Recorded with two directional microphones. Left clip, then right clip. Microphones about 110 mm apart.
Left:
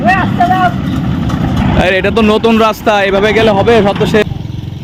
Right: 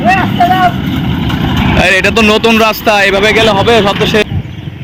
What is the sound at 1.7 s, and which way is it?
Speech, 15° left (ahead or behind).